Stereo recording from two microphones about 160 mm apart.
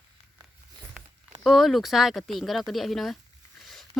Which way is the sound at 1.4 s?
Centre (ahead or behind).